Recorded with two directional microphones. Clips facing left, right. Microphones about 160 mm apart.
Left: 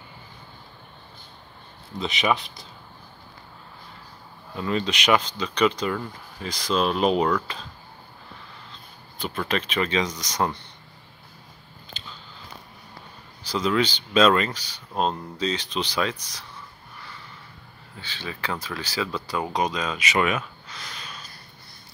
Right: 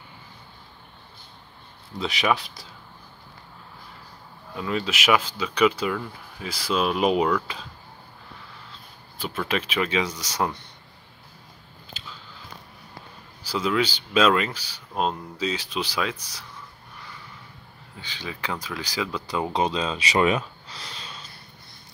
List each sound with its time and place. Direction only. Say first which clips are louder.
2.0 s speech: even; centre (ahead or behind)
4.6 s speech: left 1 dB; 5° right (ahead or behind)
9.2 s speech: even; 5° right (ahead or behind)
11.9 s biting: even; 5° right (ahead or behind)
13.4 s speech: left 1 dB; 10° right (ahead or behind)
17.9 s speech: even; 15° right (ahead or behind)